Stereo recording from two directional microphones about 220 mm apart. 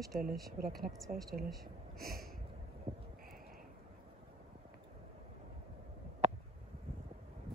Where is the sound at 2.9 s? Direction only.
25° right (ahead or behind).